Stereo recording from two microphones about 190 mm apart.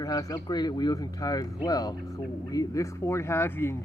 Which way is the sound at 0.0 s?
20° left (ahead or behind).